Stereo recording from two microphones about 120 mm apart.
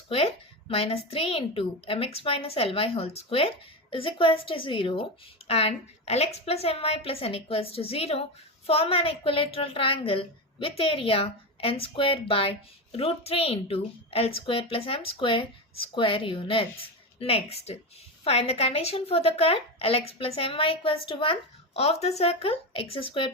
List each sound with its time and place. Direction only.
0.1 s a woman's voice: 55° left (ahead or behind)
5.5 s a woman's voice: 55° left (ahead or behind)